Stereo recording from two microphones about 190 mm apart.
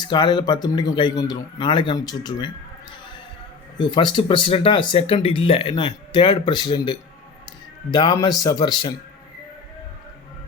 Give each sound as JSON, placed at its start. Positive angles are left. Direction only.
{"t": 0.0, "sound": "speech", "side_deg": 25}
{"t": 3.8, "sound": "speech", "side_deg": 25}